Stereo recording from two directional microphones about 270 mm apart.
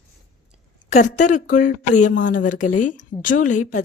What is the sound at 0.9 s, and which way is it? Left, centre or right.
Speech, left.